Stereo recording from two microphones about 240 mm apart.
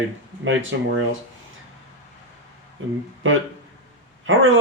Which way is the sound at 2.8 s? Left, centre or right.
Right.